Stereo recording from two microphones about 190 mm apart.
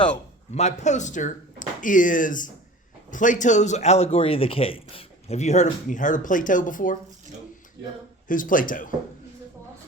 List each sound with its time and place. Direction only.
0.5 s a man's voice: 35° left (ahead or behind)
8.3 s speech: 45° left (ahead or behind)